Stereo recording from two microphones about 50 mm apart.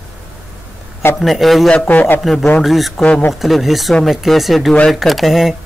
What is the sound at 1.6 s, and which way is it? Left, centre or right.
Speech, left.